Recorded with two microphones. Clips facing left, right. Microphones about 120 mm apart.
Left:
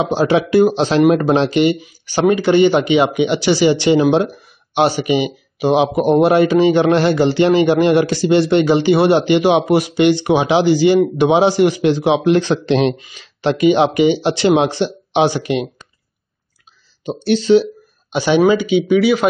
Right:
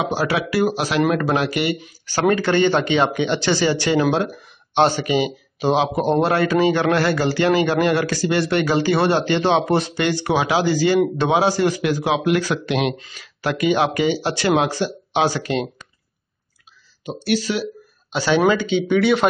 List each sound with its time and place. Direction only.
0.0 s speech: 25° left (ahead or behind)
17.0 s speech: 30° left (ahead or behind); by 19.2 s 5° left (ahead or behind)